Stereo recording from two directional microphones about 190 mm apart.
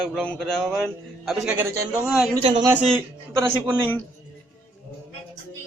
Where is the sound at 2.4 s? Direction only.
25° right (ahead or behind).